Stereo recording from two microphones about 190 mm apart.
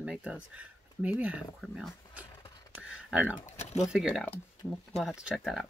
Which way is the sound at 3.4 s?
35° left (ahead or behind).